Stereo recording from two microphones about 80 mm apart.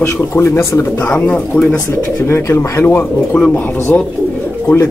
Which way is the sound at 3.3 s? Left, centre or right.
Centre.